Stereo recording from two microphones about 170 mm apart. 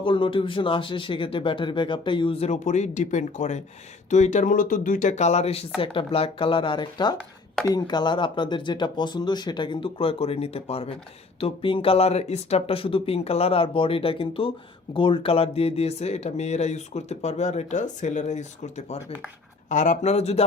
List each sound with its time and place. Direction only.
0.0 s speech: 30° left (ahead or behind)